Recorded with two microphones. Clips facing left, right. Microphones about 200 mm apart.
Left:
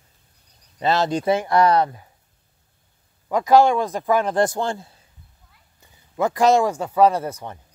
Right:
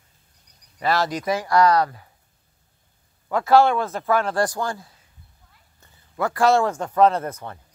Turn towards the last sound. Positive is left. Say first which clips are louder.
# left 1 dB
turn(degrees=15)  # may be behind; listen again after turning